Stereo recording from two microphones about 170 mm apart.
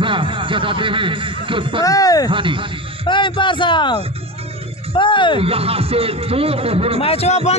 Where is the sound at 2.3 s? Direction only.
30° right (ahead or behind).